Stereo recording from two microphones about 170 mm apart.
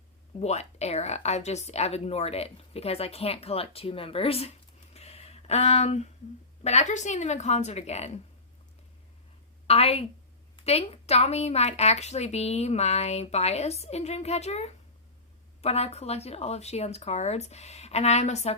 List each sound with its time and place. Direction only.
0.3 s speech: 40° left (ahead or behind)
4.9 s a sound: 35° left (ahead or behind)
6.6 s speech: 40° left (ahead or behind)
9.6 s speech: 35° left (ahead or behind)